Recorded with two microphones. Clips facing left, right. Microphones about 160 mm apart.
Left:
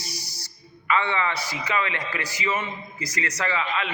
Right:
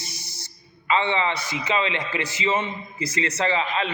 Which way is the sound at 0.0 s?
25° right (ahead or behind).